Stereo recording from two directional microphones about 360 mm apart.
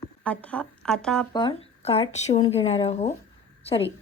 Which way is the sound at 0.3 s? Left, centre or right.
Centre.